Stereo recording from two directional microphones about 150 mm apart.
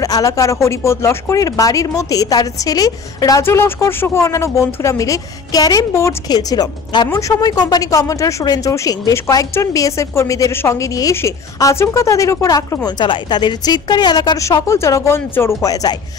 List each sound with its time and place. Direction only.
0.0 s speech: 20° left (ahead or behind)